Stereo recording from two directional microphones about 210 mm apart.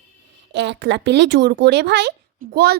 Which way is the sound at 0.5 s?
55° right (ahead or behind).